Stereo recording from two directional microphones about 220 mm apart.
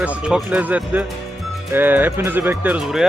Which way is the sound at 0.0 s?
5° right (ahead or behind).